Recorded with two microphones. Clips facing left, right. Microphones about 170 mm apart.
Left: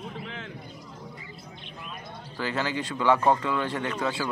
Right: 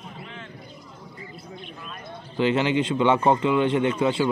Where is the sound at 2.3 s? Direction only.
20° right (ahead or behind).